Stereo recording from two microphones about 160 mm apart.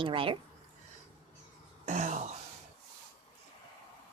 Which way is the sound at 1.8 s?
50° right (ahead or behind).